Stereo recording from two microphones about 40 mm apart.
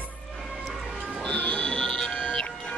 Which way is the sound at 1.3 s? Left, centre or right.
Left.